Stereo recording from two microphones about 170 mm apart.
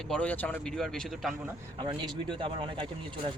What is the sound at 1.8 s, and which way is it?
Speech, 30° right (ahead or behind).